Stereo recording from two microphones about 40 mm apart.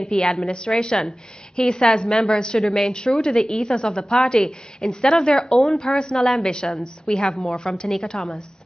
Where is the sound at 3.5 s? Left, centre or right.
Left.